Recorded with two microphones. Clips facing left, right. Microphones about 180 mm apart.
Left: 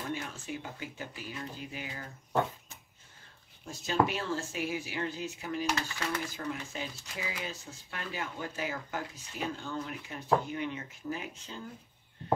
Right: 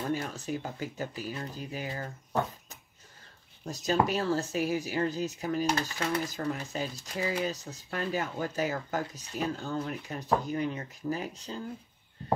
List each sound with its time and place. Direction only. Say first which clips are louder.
0.1 s speech: right 5 dB; 40° right (ahead or behind)
3.6 s speech: right 2 dB; 40° right (ahead or behind)